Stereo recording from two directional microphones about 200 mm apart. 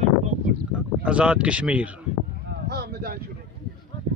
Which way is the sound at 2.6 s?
55° right (ahead or behind).